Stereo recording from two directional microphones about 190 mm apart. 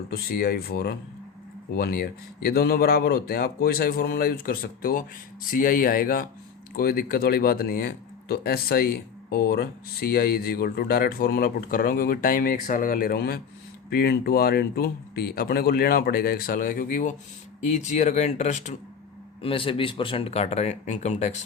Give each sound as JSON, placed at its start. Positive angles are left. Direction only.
{"t": 0.1, "sound": "speech", "side_deg": 55}